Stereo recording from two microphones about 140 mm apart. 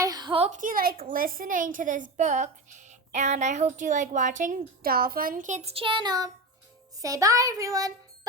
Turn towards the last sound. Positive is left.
turn(degrees=-25)  # may be behind; listen again after turning